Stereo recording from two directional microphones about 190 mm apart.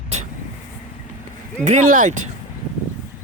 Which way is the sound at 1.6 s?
40° right (ahead or behind).